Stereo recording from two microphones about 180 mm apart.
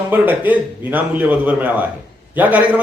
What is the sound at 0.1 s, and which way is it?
Speech, 10° right (ahead or behind).